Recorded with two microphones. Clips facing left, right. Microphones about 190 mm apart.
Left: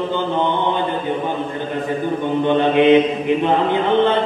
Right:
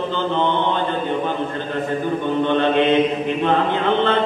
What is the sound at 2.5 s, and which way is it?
Mantra, 15° left (ahead or behind).